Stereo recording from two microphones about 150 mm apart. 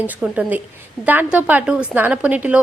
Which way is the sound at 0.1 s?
10° right (ahead or behind).